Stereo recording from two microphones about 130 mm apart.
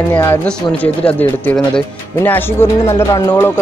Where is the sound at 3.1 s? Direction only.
30° left (ahead or behind).